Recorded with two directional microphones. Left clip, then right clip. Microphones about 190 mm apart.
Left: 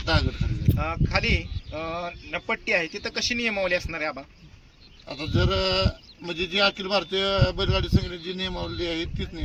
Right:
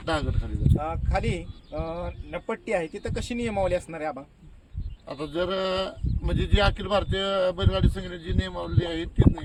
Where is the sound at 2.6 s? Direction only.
50° right (ahead or behind).